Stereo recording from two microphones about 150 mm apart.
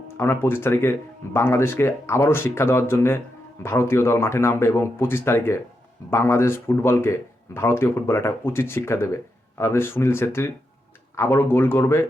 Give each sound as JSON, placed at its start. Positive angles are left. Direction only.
{"t": 0.2, "sound": "speech", "side_deg": 15}